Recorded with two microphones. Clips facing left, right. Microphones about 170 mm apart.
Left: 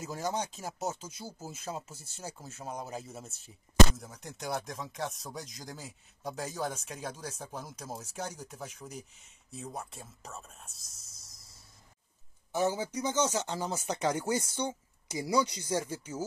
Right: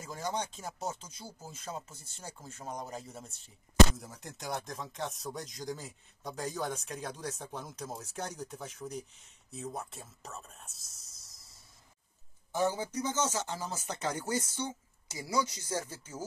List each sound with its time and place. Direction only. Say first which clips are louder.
0.0 s speech: left 2 dB; 5° left (ahead or behind)
12.5 s speech: left 1 dB; 10° left (ahead or behind)